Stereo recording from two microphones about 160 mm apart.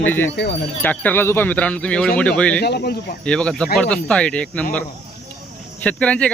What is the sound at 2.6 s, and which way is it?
Speech, 80° left.